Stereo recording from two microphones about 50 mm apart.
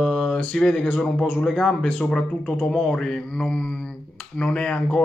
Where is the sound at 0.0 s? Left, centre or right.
Centre.